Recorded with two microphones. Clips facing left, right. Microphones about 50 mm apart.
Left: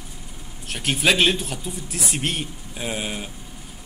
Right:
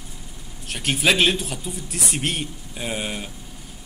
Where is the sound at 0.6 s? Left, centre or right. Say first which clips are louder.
Even; centre.